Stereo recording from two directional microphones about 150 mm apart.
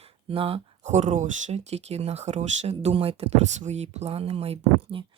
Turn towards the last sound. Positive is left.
turn(degrees=-40)  # may be behind; listen again after turning